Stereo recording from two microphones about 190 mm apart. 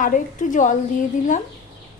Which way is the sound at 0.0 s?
45° left (ahead or behind).